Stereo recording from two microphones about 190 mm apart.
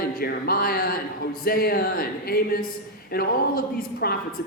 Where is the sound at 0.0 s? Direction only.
55° left (ahead or behind).